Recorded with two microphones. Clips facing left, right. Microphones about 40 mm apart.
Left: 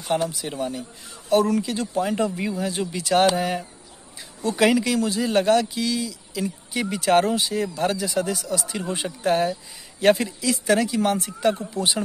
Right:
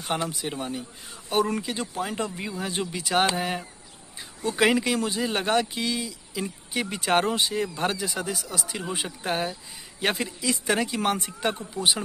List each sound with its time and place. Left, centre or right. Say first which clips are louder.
0.1 s speech: left 5 dB; right
0.5 s speech: left 3 dB; centre
2.0 s speech: left 7 dB; centre
2.6 s speech: left 3 dB; centre
4.7 s speech: left 3 dB; right